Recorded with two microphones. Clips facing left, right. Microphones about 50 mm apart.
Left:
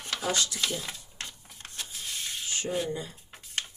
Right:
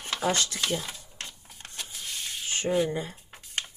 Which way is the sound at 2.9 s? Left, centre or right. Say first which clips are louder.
Right 3 dB; right.